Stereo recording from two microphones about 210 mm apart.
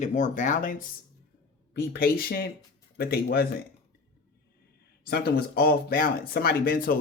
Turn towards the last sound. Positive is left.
turn(degrees=45)  # may be behind; listen again after turning